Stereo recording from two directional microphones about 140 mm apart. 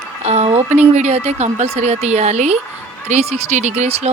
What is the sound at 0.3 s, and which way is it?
Speech, 50° right (ahead or behind).